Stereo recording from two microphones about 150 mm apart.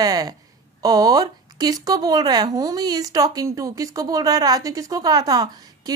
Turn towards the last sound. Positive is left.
turn(degrees=-25)  # may be behind; listen again after turning